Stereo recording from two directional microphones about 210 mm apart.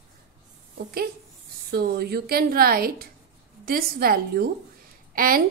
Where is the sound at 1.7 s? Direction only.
50° right (ahead or behind).